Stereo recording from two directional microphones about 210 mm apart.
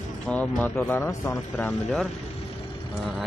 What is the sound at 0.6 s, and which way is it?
Speech, 5° left (ahead or behind).